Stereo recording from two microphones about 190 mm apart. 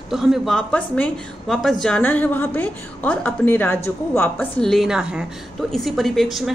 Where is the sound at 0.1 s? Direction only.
Centre (ahead or behind).